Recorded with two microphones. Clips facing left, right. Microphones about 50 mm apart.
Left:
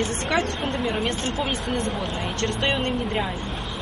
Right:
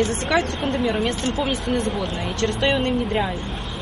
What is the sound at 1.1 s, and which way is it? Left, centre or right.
Speech, left.